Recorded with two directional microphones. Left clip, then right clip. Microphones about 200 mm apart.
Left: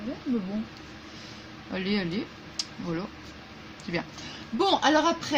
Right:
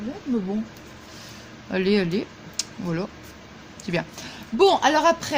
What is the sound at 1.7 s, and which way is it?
Speech, 50° right (ahead or behind).